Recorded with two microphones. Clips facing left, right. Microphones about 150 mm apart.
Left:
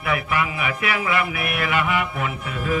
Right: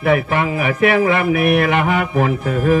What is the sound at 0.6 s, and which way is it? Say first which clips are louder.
Mantra: right 10 dB; 50° right (ahead or behind).